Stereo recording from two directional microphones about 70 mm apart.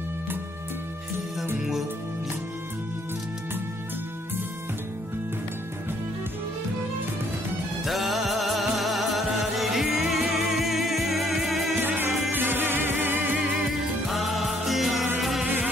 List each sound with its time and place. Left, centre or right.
1.6 s music: centre
7.8 s music: centre
11.8 s music: right
14.0 s music: centre